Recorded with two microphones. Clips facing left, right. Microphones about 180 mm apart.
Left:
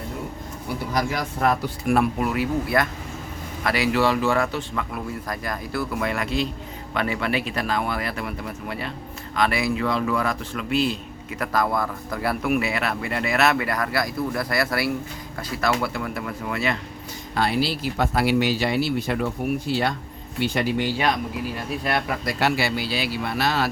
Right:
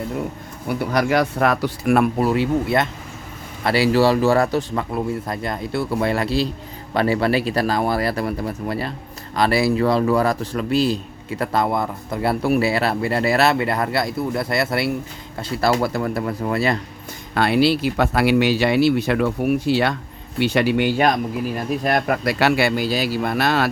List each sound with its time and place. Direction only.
0.8 s speech: 70° right (ahead or behind)
2.1 s a man's voice: 30° right (ahead or behind)
17.3 s speech: 65° right (ahead or behind)
21.8 s speech: 50° right (ahead or behind)